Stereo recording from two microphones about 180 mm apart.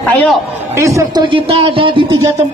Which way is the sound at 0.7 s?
15° right (ahead or behind).